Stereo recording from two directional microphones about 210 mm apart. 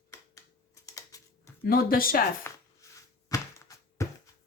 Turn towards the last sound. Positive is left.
turn(degrees=15)  # may be behind; listen again after turning